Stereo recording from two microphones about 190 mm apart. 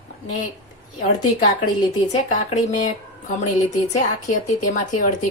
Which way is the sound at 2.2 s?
40° left (ahead or behind).